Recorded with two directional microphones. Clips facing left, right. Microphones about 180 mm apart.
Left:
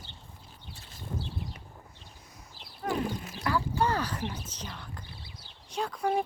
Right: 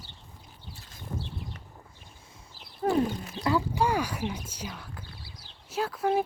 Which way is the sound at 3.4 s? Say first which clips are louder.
Right 3 dB; 20° right (ahead or behind).